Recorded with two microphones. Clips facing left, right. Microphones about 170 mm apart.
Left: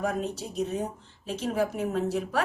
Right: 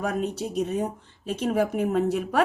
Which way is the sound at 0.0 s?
60° right (ahead or behind).